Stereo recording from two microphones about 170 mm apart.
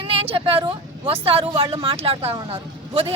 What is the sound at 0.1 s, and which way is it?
A woman's voice, 35° right (ahead or behind).